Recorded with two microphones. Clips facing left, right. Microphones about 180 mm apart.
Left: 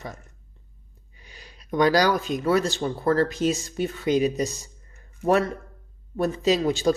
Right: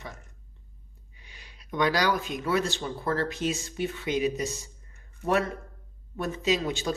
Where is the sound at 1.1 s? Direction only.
40° left (ahead or behind).